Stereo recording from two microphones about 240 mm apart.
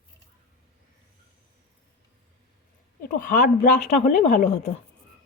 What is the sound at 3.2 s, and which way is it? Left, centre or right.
Speech, left.